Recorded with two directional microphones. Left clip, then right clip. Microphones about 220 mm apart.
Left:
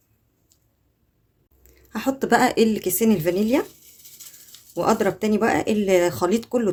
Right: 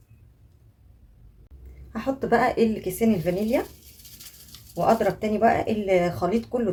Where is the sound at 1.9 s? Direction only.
50° left (ahead or behind).